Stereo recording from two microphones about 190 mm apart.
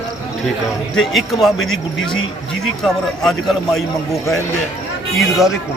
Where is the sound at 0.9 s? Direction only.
Centre (ahead or behind).